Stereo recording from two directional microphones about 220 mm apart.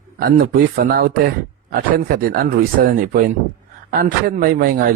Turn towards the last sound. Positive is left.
turn(degrees=-40)  # may be behind; listen again after turning